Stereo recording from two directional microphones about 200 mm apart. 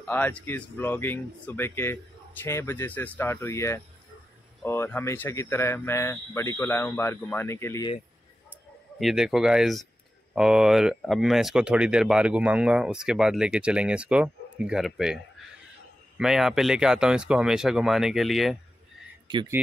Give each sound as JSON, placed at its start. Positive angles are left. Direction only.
{"t": 0.0, "sound": "speech", "side_deg": 10}
{"t": 9.0, "sound": "speech", "side_deg": 0}
{"t": 16.2, "sound": "speech", "side_deg": 0}
{"t": 19.2, "sound": "speech", "side_deg": -20}